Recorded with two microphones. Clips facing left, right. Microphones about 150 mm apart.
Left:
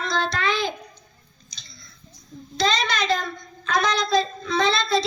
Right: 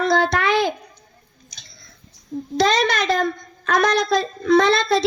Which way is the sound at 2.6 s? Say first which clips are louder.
Right 5 dB; 60° right (ahead or behind).